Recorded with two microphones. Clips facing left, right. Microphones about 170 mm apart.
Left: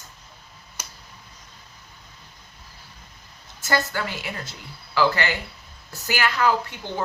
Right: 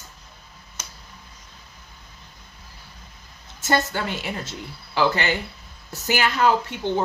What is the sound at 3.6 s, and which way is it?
Speech, 25° right (ahead or behind).